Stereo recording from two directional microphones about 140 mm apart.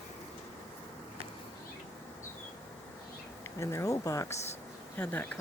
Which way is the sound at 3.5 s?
20° left (ahead or behind).